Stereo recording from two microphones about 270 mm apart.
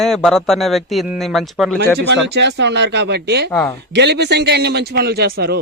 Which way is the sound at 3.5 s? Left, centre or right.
Centre.